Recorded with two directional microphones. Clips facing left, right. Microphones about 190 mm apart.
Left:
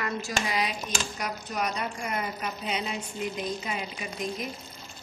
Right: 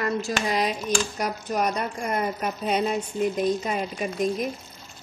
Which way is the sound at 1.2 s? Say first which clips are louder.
Right 6 dB; 45° right (ahead or behind).